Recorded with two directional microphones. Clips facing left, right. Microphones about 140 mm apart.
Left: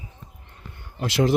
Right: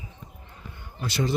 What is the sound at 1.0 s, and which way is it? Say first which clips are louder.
Speech: left 6 dB; 90° left.